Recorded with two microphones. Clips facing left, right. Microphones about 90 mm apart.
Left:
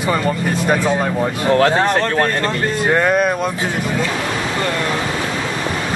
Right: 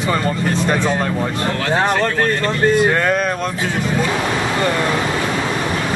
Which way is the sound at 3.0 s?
10° left (ahead or behind).